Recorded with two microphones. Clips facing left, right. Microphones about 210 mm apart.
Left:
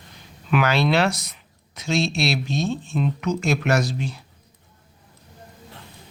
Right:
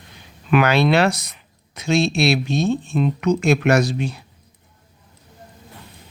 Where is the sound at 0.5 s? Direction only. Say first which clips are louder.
Right 4 dB; 60° right (ahead or behind).